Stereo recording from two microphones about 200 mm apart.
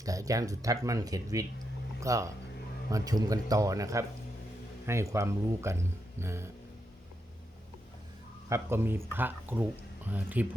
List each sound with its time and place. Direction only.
0.0 s speech: 15° right (ahead or behind)
8.4 s speech: 15° right (ahead or behind)